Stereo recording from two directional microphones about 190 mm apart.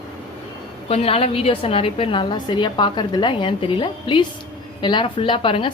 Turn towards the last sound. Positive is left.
turn(degrees=25)  # may be behind; listen again after turning